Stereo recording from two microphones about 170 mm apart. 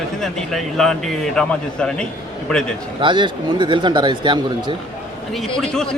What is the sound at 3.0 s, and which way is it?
Speech, 30° right (ahead or behind).